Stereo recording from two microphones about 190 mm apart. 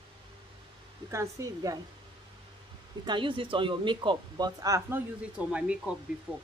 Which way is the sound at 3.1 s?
25° right (ahead or behind).